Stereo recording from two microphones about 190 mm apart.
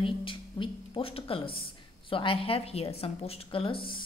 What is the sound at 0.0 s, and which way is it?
A woman's voice, 25° left (ahead or behind).